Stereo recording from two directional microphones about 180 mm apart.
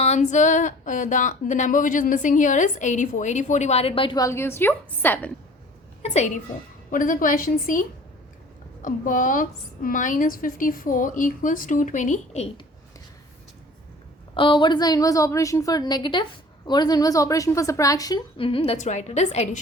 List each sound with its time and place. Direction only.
0.0 s speech: 40° left (ahead or behind); by 5.3 s 10° left (ahead or behind)
6.0 s a woman's voice: 40° left (ahead or behind)
6.9 s speech: 50° left (ahead or behind)
14.3 s a woman's voice: 25° left (ahead or behind)